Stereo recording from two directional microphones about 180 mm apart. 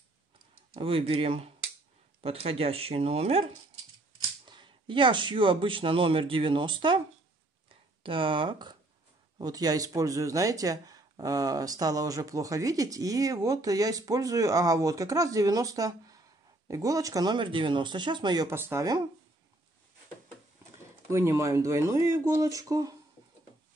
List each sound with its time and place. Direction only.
0.7 s speech: 30° right (ahead or behind)
8.0 s speech: 30° right (ahead or behind)
21.1 s speech: 15° right (ahead or behind)